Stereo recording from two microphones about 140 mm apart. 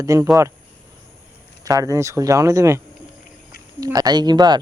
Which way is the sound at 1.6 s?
25° right (ahead or behind).